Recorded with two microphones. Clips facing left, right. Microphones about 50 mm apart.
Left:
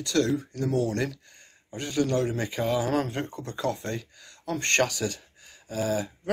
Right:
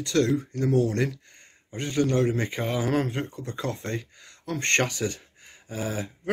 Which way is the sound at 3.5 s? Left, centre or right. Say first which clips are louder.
Left 1 dB; right.